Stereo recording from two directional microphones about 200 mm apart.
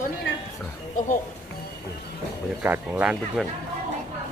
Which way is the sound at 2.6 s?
10° right (ahead or behind).